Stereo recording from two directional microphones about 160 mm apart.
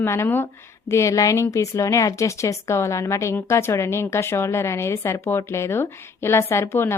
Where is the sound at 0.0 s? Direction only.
15° left (ahead or behind).